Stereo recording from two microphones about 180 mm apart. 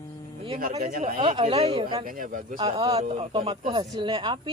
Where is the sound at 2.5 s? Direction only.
25° right (ahead or behind).